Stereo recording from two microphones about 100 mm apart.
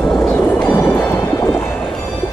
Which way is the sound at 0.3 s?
20° left (ahead or behind).